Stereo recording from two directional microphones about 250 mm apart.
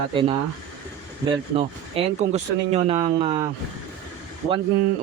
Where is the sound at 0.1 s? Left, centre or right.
Right.